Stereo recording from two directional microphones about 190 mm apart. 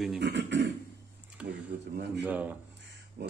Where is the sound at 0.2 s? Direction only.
65° right (ahead or behind).